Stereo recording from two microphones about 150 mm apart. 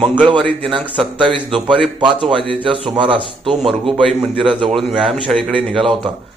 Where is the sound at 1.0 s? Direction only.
Centre (ahead or behind).